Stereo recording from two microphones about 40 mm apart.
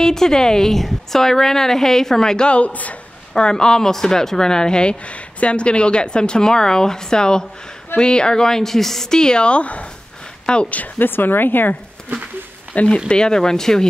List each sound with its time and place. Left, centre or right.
0.0 s a woman's voice: centre
2.5 s a man's voice: left
3.3 s speech: centre
11.0 s speech: left
12.7 s a man's voice: left
13.1 s a woman's voice: centre